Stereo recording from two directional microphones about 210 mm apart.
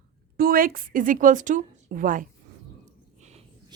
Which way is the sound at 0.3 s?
45° right (ahead or behind).